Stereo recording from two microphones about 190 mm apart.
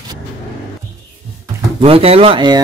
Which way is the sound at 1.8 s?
30° right (ahead or behind).